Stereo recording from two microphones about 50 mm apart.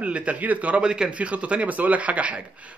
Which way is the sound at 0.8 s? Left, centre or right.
Centre.